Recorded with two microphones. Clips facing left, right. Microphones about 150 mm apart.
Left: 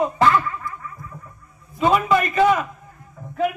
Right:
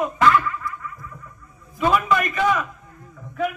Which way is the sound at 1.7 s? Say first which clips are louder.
Left 2 dB; 25° left (ahead or behind).